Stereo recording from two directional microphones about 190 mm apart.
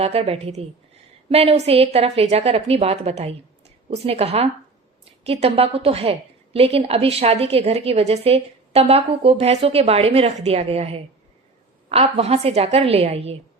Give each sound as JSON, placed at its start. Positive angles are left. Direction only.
{"t": 0.0, "sound": "a woman's voice", "side_deg": -30}